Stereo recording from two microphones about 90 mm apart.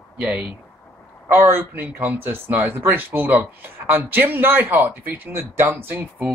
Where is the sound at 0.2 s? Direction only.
15° right (ahead or behind).